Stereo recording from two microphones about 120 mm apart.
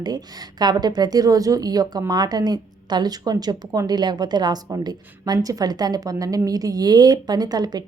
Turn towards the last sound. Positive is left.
turn(degrees=-35)  # may be behind; listen again after turning